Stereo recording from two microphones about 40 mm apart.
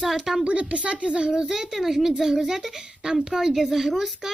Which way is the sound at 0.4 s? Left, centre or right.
Right.